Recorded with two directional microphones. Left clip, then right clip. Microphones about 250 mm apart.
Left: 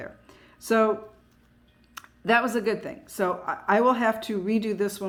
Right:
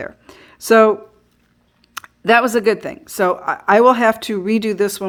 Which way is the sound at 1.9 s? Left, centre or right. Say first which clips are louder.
Right 9 dB; right.